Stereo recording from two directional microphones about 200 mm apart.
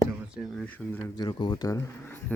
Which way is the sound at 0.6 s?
10° left (ahead or behind).